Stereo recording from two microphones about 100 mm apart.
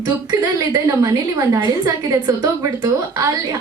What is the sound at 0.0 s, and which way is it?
A woman's voice, 40° right (ahead or behind).